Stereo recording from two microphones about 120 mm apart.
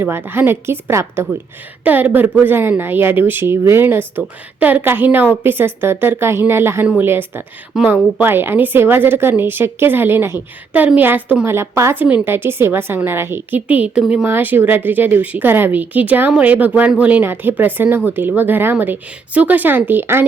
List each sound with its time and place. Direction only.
0.0 s a woman's voice: 15° right (ahead or behind)